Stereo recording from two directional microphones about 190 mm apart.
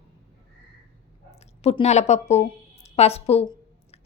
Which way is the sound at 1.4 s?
35° left (ahead or behind).